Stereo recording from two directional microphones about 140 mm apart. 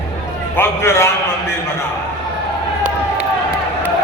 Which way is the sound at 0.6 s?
20° left (ahead or behind).